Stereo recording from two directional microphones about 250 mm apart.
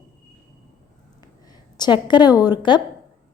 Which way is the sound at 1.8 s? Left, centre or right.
Centre.